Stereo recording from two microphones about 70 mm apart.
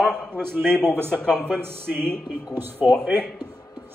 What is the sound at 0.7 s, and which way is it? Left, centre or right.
Speech, right.